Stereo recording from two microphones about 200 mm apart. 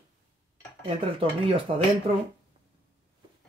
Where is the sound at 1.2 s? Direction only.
25° right (ahead or behind).